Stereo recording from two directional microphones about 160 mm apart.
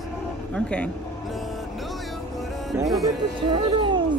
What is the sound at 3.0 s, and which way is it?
Speech, 30° right (ahead or behind).